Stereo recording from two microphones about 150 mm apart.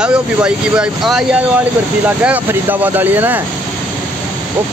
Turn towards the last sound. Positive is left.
turn(degrees=-15)  # may be behind; listen again after turning